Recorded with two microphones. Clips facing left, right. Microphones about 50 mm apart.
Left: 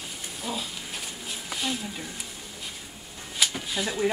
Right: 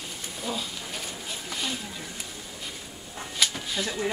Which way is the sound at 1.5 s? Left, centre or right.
Centre.